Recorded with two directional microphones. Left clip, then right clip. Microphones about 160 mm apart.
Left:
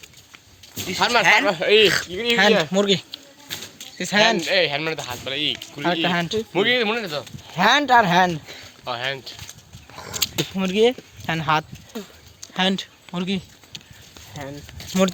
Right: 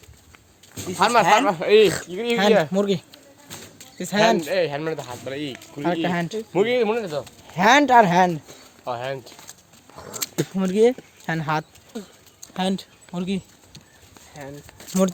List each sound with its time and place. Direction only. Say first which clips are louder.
0.9 s speech: right 1 dB; 75° right (ahead or behind)
1.2 s speech: left 1 dB; 40° right (ahead or behind)
1.5 s speech: even; 75° right (ahead or behind)
2.7 s speech: left 3 dB; 5° right (ahead or behind)
4.4 s speech: left 3 dB; 45° right (ahead or behind)
5.8 s speech: left 2 dB; centre (ahead or behind)
6.1 s speech: left 4 dB; 20° right (ahead or behind)
6.5 s speech: even; 45° right (ahead or behind)
7.1 s speech: even; 15° right (ahead or behind)
8.8 s speech: left 1 dB; 50° right (ahead or behind)
10.2 s a sound: left 4 dB; 40° right (ahead or behind)
10.5 s speech: right 1 dB; 25° right (ahead or behind)
12.5 s speech: left 4 dB; centre (ahead or behind)
14.8 s a sound: left 2 dB; 20° right (ahead or behind)